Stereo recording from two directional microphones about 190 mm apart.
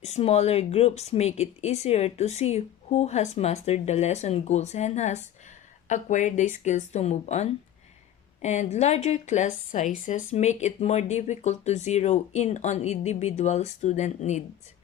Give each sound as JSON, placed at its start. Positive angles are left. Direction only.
{"t": 0.0, "sound": "a woman's voice", "side_deg": 35}